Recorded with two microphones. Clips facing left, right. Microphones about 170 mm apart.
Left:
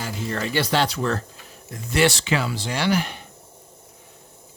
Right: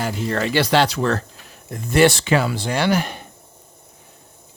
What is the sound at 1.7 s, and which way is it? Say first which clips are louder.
Speech: right 5 dB; 50° right (ahead or behind).